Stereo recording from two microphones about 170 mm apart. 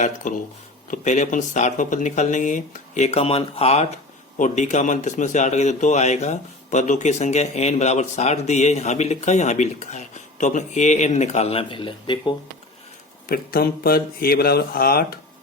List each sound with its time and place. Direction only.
0.0 s speech: 50° left (ahead or behind); by 12.3 s 30° left (ahead or behind)
13.2 s speech: 60° left (ahead or behind)